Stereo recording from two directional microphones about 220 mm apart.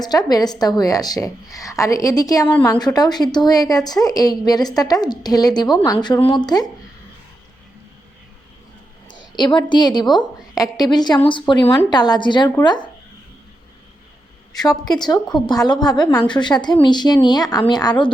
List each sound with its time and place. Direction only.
0.0 s a woman's voice: 15° left (ahead or behind)
9.4 s a woman's voice: 20° left (ahead or behind)
14.7 s a woman's voice: 20° left (ahead or behind)